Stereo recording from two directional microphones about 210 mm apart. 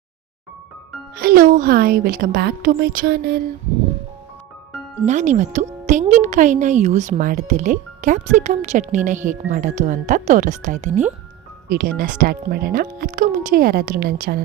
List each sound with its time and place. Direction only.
1.1 s speech: 45° right (ahead or behind)
5.0 s speech: 35° right (ahead or behind)